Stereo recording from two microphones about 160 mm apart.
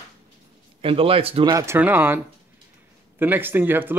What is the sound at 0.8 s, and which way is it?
Speech, 35° right (ahead or behind).